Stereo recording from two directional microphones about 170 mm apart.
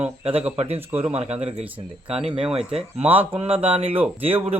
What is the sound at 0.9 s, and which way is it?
Speech, 15° right (ahead or behind).